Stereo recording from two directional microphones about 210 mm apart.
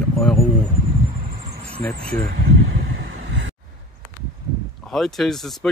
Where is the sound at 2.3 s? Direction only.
60° right (ahead or behind).